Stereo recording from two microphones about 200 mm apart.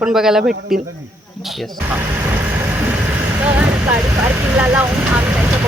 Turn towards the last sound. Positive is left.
turn(degrees=-10)  # may be behind; listen again after turning